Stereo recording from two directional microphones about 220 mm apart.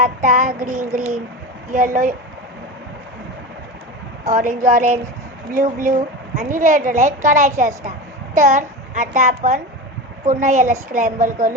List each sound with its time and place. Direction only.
0.0 s a woman's voice: 35° right (ahead or behind)
4.3 s a woman's voice: 35° right (ahead or behind)